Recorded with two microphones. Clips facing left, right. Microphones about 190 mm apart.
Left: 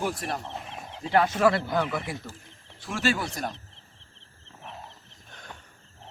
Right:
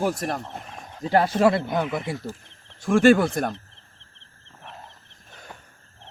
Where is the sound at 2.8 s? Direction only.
50° right (ahead or behind).